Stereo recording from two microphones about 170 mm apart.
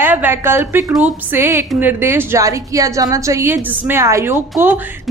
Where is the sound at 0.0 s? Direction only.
10° right (ahead or behind).